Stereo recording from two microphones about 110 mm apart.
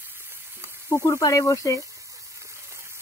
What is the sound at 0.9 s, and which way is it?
Speech, 30° left (ahead or behind).